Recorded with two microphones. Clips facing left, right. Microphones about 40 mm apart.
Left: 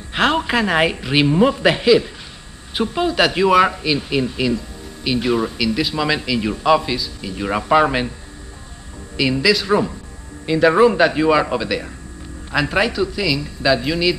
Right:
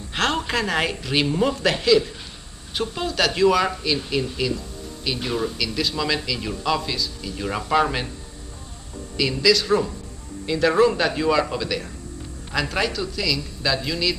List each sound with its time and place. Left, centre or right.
0.1 s a man's voice: centre
9.1 s a man's voice: centre